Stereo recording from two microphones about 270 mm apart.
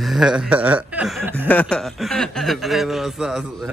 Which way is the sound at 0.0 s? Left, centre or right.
Centre.